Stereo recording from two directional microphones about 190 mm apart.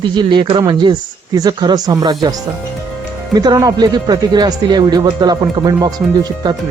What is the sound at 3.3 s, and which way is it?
Speech, 20° right (ahead or behind).